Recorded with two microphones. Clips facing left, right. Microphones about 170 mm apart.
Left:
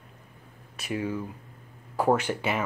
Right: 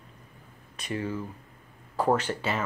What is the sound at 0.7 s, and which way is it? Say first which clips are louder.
Speech: left 2 dB; 10° left (ahead or behind).